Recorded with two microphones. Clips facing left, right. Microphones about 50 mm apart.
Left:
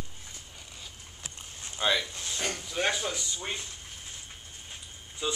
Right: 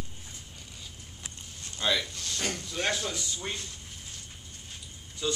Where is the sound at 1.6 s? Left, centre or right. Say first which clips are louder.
Left 1 dB; centre.